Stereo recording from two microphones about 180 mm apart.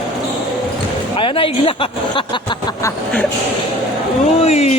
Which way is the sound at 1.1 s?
30° left (ahead or behind).